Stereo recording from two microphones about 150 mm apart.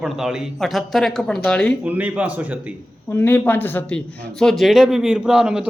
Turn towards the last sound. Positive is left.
turn(degrees=-5)  # may be behind; listen again after turning